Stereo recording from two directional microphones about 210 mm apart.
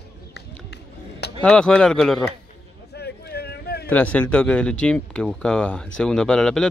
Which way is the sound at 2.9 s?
50° left (ahead or behind).